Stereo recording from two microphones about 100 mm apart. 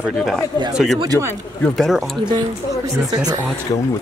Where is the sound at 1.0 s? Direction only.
35° right (ahead or behind).